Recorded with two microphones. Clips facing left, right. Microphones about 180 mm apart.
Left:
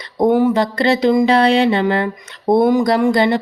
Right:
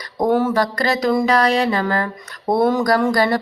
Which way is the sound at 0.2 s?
15° left (ahead or behind).